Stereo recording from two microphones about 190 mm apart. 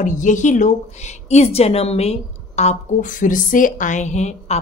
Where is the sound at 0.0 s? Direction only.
40° left (ahead or behind).